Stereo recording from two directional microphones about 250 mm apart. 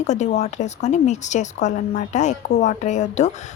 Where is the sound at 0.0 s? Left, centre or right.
Left.